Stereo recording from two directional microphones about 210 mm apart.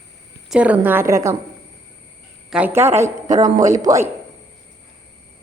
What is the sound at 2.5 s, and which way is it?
A woman's voice, 5° right (ahead or behind).